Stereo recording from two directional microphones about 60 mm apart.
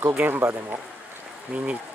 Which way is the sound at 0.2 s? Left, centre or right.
Right.